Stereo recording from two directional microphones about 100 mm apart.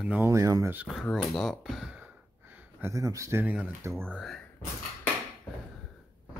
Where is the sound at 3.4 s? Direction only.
15° right (ahead or behind).